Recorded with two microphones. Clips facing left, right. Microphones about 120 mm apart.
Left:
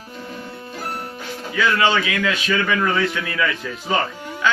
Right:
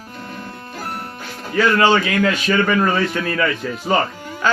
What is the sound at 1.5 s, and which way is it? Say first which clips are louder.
A man's voice: right 4 dB; 40° right (ahead or behind).